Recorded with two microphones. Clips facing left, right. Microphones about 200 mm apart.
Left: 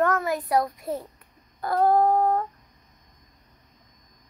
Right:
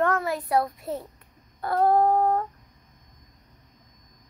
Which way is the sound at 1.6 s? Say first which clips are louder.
Even; centre (ahead or behind).